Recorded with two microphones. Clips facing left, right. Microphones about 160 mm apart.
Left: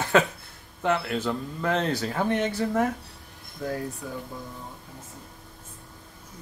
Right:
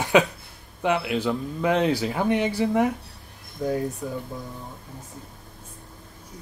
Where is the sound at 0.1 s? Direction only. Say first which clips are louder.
Right 3 dB; 15° right (ahead or behind).